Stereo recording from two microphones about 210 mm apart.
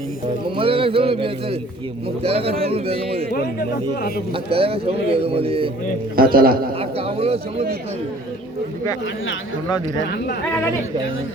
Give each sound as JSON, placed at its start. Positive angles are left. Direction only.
{"t": 0.5, "sound": "speech", "side_deg": -25}
{"t": 3.3, "sound": "speech", "side_deg": 45}
{"t": 4.4, "sound": "speech", "side_deg": -25}
{"t": 6.1, "sound": "a man's voice", "side_deg": -45}
{"t": 6.7, "sound": "speech", "side_deg": -25}